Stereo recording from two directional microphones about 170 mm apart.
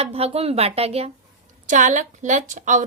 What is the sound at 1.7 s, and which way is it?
A woman's voice, 50° right (ahead or behind).